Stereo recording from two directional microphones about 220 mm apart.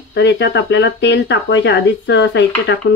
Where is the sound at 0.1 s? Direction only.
50° left (ahead or behind).